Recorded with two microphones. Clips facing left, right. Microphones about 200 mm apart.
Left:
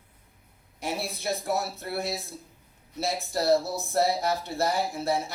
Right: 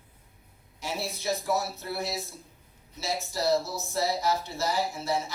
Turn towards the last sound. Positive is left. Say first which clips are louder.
# left 3 dB
turn(degrees=55)  # may be behind; listen again after turning